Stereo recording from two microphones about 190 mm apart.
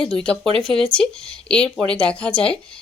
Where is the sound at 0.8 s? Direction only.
5° left (ahead or behind).